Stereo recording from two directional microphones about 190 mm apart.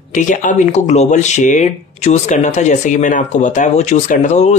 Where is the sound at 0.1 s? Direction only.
40° left (ahead or behind).